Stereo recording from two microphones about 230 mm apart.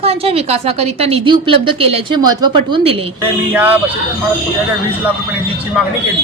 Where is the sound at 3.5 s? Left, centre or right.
Centre.